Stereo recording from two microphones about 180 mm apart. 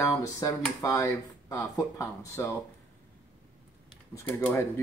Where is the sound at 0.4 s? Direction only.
15° left (ahead or behind).